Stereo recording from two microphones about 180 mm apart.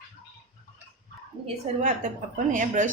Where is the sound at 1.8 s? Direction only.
45° right (ahead or behind).